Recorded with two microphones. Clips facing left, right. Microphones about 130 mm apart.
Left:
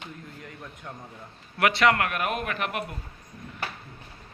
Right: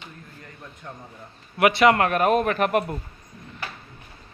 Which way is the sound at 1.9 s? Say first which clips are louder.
Right 8 dB; 35° right (ahead or behind).